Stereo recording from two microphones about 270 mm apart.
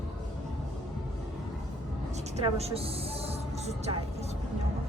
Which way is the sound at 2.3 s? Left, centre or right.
Right.